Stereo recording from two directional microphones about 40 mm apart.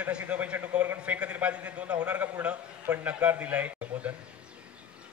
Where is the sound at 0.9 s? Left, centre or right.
Right.